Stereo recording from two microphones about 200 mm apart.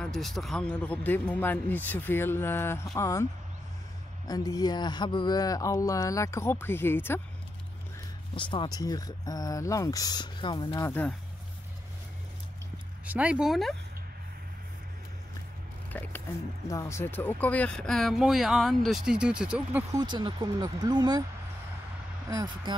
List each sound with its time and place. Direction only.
0.0 s speech: centre (ahead or behind)
4.3 s speech: 20° left (ahead or behind)
8.4 s speech: 25° left (ahead or behind)
13.0 s speech: 5° right (ahead or behind)
15.9 s speech: 10° left (ahead or behind)
19.9 s speech: 20° right (ahead or behind)
22.3 s speech: 20° right (ahead or behind)